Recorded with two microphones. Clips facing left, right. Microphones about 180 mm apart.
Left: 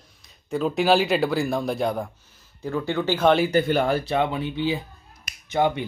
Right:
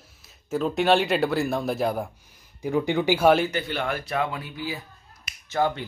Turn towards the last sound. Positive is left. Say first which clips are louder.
# left 2 dB
turn(degrees=15)  # may be behind; listen again after turning